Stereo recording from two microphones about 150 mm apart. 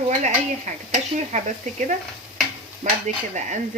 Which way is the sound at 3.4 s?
55° right (ahead or behind).